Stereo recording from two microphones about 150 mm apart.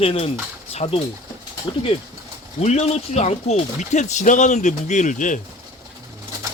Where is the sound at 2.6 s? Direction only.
45° left (ahead or behind).